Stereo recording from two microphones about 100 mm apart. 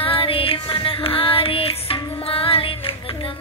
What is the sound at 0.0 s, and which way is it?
Music, 65° left (ahead or behind).